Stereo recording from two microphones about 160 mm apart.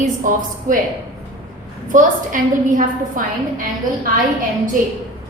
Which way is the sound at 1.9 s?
55° right (ahead or behind).